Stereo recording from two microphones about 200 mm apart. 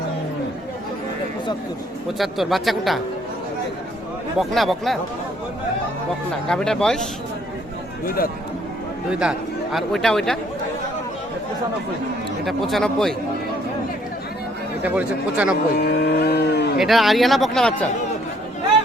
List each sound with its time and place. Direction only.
2.1 s speech: centre (ahead or behind)
4.4 s speech: centre (ahead or behind)
6.5 s speech: 5° left (ahead or behind)
8.0 s speech: 45° left (ahead or behind)
9.0 s speech: 5° right (ahead or behind)
12.5 s speech: centre (ahead or behind)
14.8 s speech: 10° right (ahead or behind)
15.7 s speech: 55° left (ahead or behind)
16.7 s speech: centre (ahead or behind)